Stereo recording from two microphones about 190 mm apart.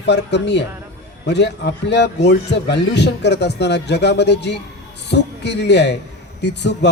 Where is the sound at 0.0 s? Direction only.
65° left (ahead or behind).